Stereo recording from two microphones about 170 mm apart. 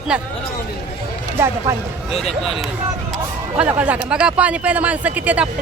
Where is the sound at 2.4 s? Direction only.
Centre (ahead or behind).